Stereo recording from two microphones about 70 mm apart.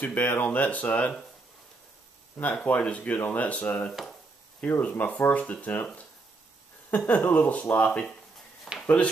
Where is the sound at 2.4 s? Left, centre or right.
Left.